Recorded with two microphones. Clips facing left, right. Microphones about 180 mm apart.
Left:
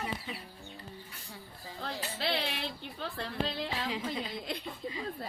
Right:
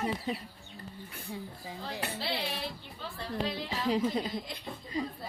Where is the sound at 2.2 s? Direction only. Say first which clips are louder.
Left 5 dB; 70° left (ahead or behind).